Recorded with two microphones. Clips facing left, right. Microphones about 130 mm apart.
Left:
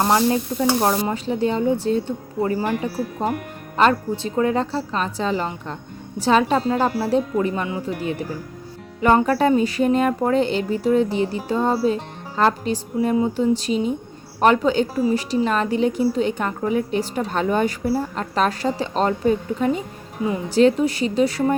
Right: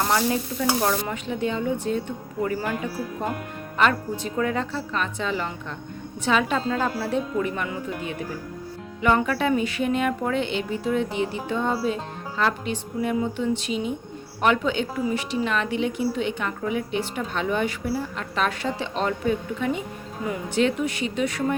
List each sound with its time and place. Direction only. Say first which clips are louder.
0.0 s a woman's voice: left 5 dB; 35° left (ahead or behind)